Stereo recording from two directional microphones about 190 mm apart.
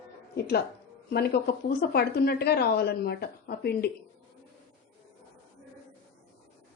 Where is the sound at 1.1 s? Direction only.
55° left (ahead or behind).